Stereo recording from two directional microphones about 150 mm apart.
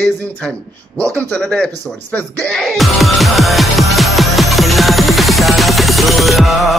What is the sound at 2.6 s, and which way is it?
Music, centre (ahead or behind).